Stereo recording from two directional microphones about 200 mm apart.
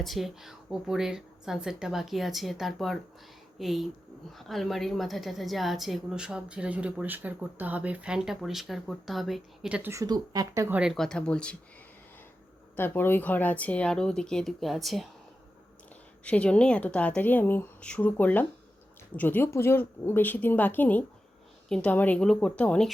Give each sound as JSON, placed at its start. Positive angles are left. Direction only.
{"t": 0.0, "sound": "a woman's voice", "side_deg": 0}
{"t": 10.8, "sound": "a woman's voice", "side_deg": 0}
{"t": 12.7, "sound": "a woman's voice", "side_deg": 10}
{"t": 16.2, "sound": "a woman's voice", "side_deg": 5}